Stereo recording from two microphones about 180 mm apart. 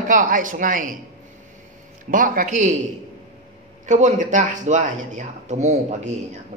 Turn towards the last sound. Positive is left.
turn(degrees=-40)  # may be behind; listen again after turning